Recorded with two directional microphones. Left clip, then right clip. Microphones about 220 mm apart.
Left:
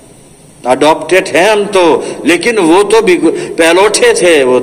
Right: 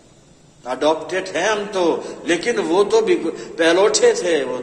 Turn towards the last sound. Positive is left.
turn(degrees=50)  # may be behind; listen again after turning